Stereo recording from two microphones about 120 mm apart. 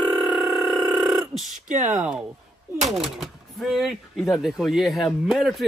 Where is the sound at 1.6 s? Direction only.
90° right.